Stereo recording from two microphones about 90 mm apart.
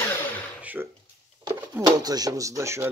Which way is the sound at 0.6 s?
20° right (ahead or behind).